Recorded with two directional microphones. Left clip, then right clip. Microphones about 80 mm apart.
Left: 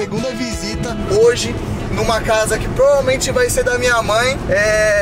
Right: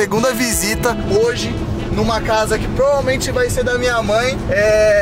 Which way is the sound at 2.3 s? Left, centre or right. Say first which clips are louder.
Even; centre.